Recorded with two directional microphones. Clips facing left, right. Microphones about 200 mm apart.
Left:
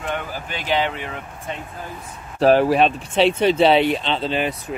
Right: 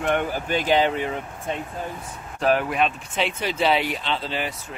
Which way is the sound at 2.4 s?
35° left (ahead or behind).